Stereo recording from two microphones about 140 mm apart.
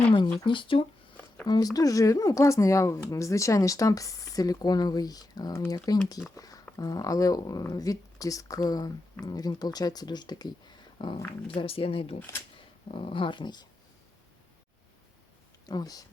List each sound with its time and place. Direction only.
0.3 s speech: 35° left (ahead or behind)
1.5 s speech: 25° left (ahead or behind)
15.6 s speech: 25° left (ahead or behind)